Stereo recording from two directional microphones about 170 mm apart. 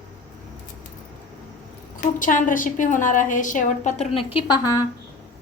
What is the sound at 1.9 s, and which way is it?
A woman's voice, 50° left (ahead or behind).